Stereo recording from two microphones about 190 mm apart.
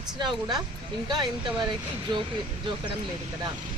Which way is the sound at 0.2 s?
25° right (ahead or behind).